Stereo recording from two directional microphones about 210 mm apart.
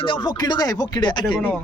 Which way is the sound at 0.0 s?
25° left (ahead or behind).